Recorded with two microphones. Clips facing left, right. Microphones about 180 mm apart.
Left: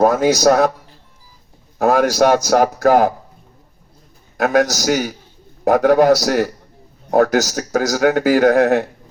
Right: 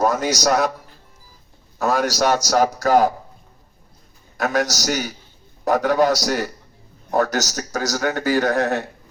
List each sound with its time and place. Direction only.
0.0 s a man's voice: 55° left (ahead or behind)
1.8 s a man's voice: 50° left (ahead or behind)
4.4 s a man's voice: 55° left (ahead or behind)